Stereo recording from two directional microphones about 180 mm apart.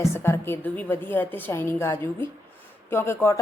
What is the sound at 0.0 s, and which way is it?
Speech, 15° left (ahead or behind).